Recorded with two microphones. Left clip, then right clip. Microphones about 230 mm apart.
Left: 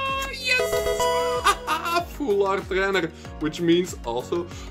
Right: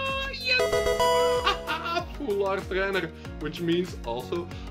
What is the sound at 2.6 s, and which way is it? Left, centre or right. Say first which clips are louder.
Speech: left 4 dB; left.